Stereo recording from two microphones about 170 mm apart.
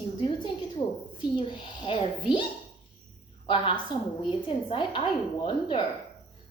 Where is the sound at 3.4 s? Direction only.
30° left (ahead or behind).